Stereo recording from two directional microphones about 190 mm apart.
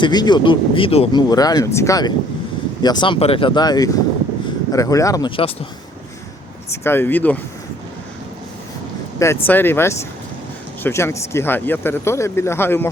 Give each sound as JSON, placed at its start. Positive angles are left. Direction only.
{"t": 0.0, "sound": "speech", "side_deg": 20}
{"t": 6.7, "sound": "speech", "side_deg": 10}
{"t": 9.1, "sound": "speech", "side_deg": 15}